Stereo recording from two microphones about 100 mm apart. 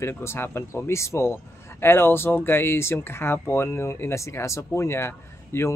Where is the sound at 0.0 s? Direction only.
25° left (ahead or behind).